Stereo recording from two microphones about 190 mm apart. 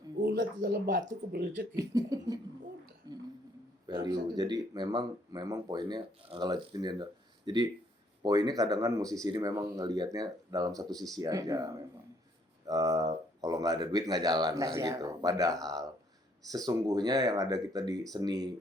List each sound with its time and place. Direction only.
0.2 s speech: 60° right (ahead or behind)
1.8 s speech: 20° right (ahead or behind)
3.1 s a sound: 20° right (ahead or behind)
3.8 s speech: 25° right (ahead or behind)